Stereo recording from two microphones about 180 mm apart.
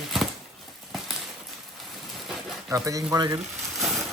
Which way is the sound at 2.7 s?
20° right (ahead or behind).